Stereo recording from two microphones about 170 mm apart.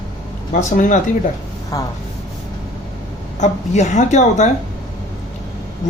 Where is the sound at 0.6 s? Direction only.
50° left (ahead or behind).